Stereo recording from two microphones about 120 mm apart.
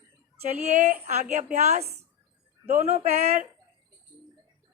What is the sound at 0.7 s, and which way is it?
Speech, 75° right (ahead or behind).